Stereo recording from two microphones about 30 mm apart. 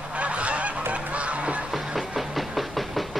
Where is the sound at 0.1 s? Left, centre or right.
Right.